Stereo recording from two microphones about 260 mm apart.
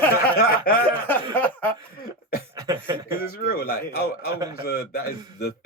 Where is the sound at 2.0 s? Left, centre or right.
Left.